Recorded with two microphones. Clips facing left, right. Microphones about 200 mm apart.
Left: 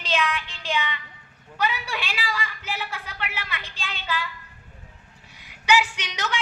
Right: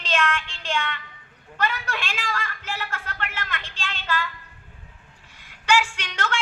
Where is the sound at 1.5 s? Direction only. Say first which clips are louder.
Even; 10° left (ahead or behind).